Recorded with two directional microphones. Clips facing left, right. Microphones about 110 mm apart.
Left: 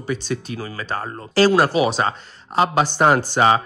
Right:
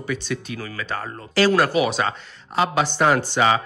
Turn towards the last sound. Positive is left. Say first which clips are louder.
# left 3 dB
turn(degrees=40)  # may be behind; listen again after turning